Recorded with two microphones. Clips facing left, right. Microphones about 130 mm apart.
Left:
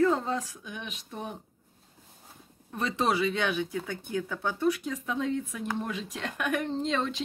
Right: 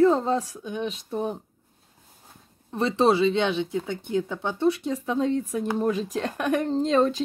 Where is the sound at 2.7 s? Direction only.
30° right (ahead or behind).